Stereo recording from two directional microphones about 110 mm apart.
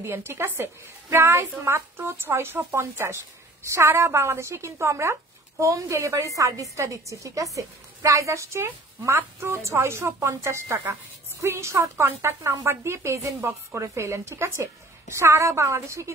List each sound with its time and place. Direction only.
0.0 s a woman's voice: 20° right (ahead or behind)